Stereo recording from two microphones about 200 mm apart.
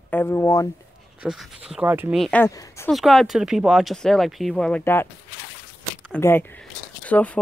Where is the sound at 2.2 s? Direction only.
5° left (ahead or behind).